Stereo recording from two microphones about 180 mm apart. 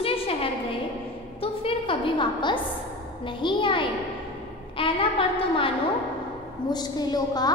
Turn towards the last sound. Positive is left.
turn(degrees=20)  # may be behind; listen again after turning